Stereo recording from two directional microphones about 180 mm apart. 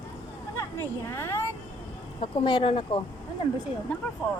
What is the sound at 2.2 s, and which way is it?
Speech, 25° left (ahead or behind).